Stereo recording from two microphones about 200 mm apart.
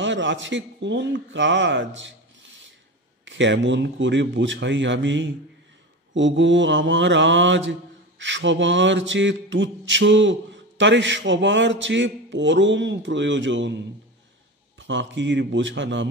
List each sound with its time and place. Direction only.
0.0 s mantra: 65° right (ahead or behind)
3.3 s mantra: 65° right (ahead or behind)
14.8 s mantra: 65° right (ahead or behind)